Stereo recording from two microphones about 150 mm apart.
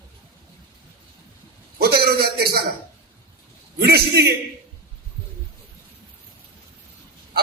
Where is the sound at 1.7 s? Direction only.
90° right.